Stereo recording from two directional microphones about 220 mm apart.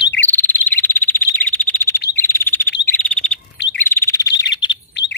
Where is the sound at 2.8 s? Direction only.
10° left (ahead or behind).